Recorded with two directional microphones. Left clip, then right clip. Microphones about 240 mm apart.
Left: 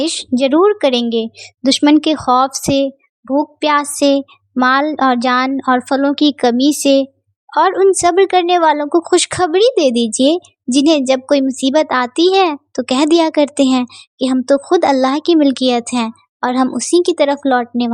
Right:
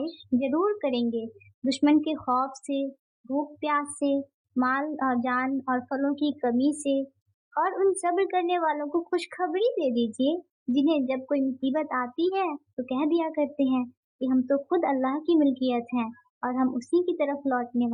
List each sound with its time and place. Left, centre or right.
0.0 s a child's voice: left